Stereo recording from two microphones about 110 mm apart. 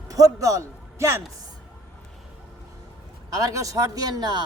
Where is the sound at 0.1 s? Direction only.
35° right (ahead or behind).